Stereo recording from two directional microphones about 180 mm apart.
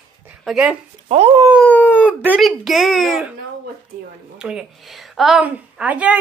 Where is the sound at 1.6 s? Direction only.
10° left (ahead or behind).